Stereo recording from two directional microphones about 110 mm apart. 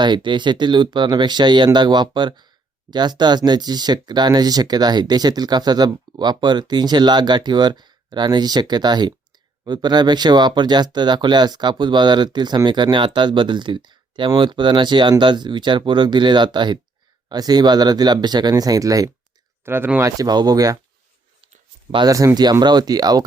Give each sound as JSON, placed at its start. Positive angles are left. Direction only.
{"t": 0.0, "sound": "speech", "side_deg": -45}
{"t": 19.6, "sound": "speech", "side_deg": -20}
{"t": 20.1, "sound": "speech", "side_deg": -35}
{"t": 21.9, "sound": "speech", "side_deg": -35}